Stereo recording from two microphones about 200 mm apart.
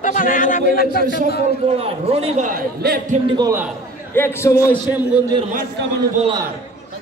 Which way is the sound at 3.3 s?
20° right (ahead or behind).